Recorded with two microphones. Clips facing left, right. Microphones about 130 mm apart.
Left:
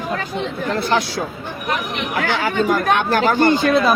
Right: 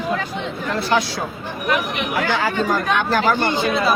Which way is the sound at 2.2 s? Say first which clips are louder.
Left 3 dB; 60° left (ahead or behind).